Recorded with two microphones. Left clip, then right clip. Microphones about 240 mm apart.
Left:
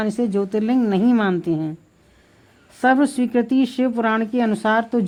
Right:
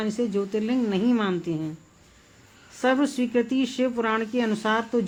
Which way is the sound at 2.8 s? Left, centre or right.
Left.